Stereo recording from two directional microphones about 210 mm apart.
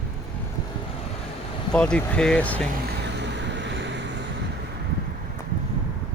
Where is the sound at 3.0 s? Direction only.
55° right (ahead or behind).